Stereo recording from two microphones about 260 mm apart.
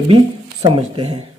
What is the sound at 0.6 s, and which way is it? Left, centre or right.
Speech, right.